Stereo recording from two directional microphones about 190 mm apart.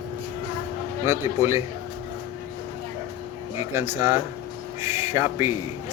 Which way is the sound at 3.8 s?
10° right (ahead or behind).